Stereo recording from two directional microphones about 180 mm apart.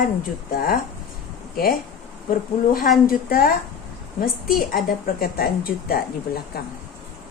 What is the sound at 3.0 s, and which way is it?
A woman's voice, 55° left (ahead or behind).